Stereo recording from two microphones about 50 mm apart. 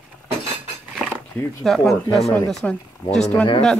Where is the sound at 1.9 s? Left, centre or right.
Centre.